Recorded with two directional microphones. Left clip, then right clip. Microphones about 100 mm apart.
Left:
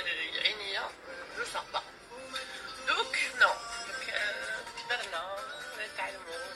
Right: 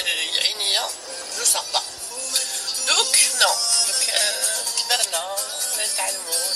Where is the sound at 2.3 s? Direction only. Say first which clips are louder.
Right 14 dB; 25° right (ahead or behind).